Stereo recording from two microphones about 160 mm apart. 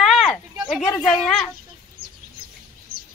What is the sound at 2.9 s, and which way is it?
Bird vocalization, 70° right (ahead or behind).